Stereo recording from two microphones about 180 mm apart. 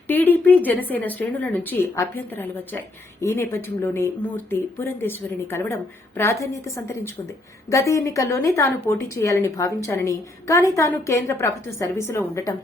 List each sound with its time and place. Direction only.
0.1 s speech: 10° left (ahead or behind)